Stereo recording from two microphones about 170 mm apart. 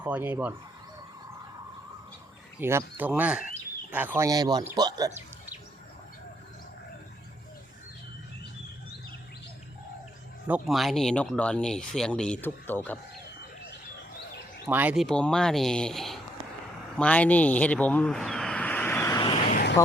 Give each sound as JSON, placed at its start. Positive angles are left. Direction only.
{"t": 0.0, "sound": "speech", "side_deg": -10}
{"t": 2.6, "sound": "speech", "side_deg": -15}
{"t": 4.3, "sound": "speech", "side_deg": -20}
{"t": 10.7, "sound": "speech", "side_deg": 0}
{"t": 14.7, "sound": "speech", "side_deg": -10}
{"t": 15.0, "sound": "speech", "side_deg": 5}
{"t": 17.0, "sound": "a sound", "side_deg": 10}